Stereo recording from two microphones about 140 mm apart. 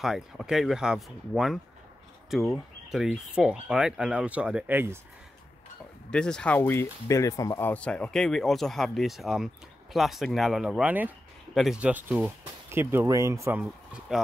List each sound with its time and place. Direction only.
0.0 s speech: 5° right (ahead or behind)
6.0 s speech: 5° left (ahead or behind); by 13.6 s 20° right (ahead or behind)